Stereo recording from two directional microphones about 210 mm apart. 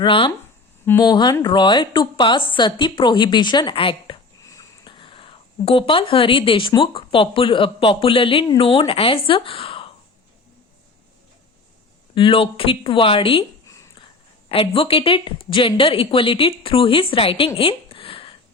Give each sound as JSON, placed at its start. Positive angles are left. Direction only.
{"t": 0.0, "sound": "a woman's voice", "side_deg": 25}
{"t": 12.1, "sound": "speech", "side_deg": 25}
{"t": 17.6, "sound": "a sound", "side_deg": 25}